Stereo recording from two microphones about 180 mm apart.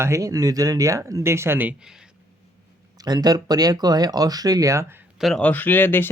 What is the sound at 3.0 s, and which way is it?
Speech, 20° right (ahead or behind).